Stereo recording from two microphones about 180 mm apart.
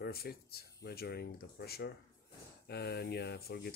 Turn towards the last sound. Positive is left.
turn(degrees=60)  # may be behind; listen again after turning